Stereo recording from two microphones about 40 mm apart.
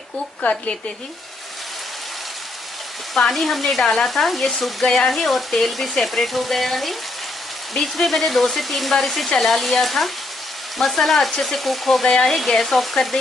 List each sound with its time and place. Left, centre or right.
0.4 s a woman's voice: left
3.3 s speech: centre
3.8 s frying: left
4.1 s speech: centre
8.0 s speech: centre
12.0 s speech: centre